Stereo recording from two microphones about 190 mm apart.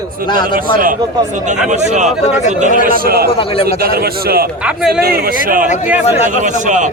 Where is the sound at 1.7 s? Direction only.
40° right (ahead or behind).